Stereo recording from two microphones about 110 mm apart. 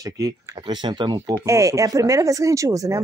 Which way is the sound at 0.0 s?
35° right (ahead or behind).